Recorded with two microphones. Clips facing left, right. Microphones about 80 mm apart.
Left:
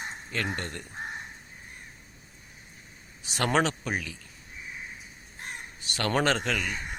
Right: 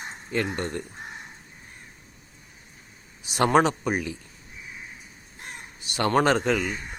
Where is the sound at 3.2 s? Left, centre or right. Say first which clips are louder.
Right 6 dB; centre.